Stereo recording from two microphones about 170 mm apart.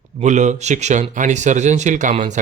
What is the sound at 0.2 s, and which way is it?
Speech, 45° right (ahead or behind).